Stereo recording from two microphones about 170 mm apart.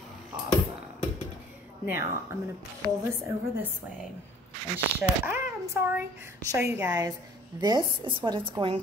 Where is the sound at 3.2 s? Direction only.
15° right (ahead or behind).